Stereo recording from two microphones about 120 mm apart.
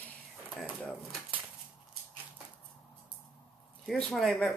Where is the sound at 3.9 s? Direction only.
5° left (ahead or behind).